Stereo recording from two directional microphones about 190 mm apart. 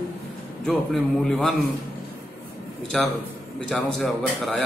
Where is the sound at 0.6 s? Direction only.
5° left (ahead or behind).